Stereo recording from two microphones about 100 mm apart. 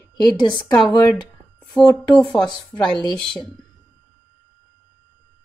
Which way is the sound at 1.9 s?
40° left (ahead or behind).